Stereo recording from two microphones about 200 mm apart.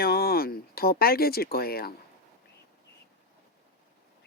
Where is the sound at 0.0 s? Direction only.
50° left (ahead or behind).